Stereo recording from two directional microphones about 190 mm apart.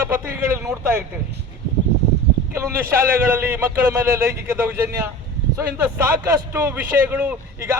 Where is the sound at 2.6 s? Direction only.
15° right (ahead or behind).